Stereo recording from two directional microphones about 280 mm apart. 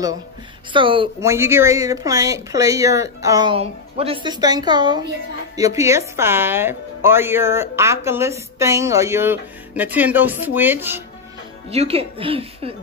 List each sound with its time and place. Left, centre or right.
0.7 s speech: centre
11.7 s a woman's voice: right